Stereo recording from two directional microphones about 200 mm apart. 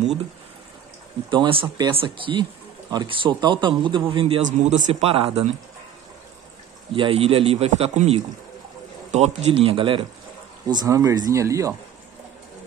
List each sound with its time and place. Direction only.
1.3 s a man's voice: 25° right (ahead or behind)
6.9 s speech: 25° right (ahead or behind)